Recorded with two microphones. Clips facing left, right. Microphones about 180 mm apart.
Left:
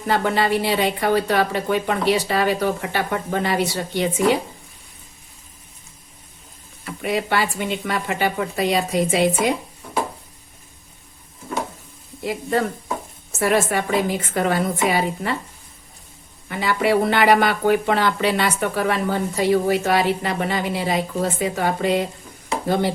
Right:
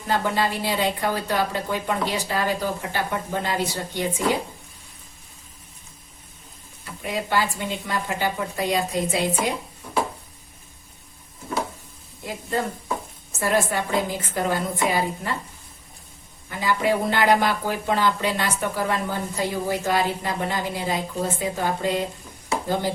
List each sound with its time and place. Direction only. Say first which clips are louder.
0.1 s speech: left 4 dB; 70° left (ahead or behind)
6.8 s speech: left 5 dB; 75° left (ahead or behind)
12.2 s speech: left 5 dB; 75° left (ahead or behind)
16.5 s speech: left 3 dB; 70° left (ahead or behind)